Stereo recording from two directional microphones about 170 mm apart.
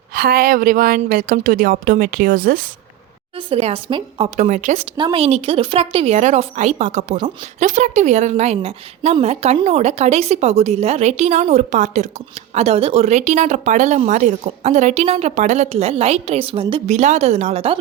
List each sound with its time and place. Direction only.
0.1 s a woman's voice: 60° right (ahead or behind)
3.3 s speech: 35° right (ahead or behind)
4.4 s a woman's voice: 45° right (ahead or behind)
4.9 s a woman's voice: 30° right (ahead or behind)